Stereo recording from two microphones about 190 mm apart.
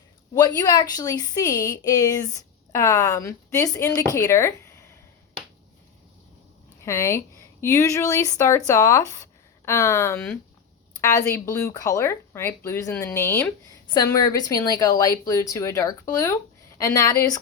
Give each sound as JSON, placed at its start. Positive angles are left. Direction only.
{"t": 0.3, "sound": "a woman's voice", "side_deg": 20}
{"t": 6.8, "sound": "a woman's voice", "side_deg": 15}